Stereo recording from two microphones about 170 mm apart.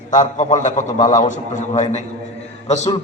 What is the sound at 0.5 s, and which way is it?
A man's voice, 45° left (ahead or behind).